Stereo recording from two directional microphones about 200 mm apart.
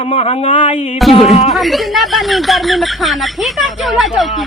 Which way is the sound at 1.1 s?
30° left (ahead or behind).